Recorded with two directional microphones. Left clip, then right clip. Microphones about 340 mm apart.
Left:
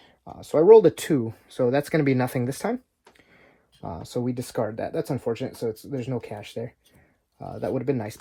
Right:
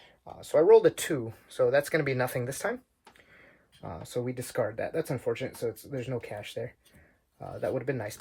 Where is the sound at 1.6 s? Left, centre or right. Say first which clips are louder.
Left 2 dB; left.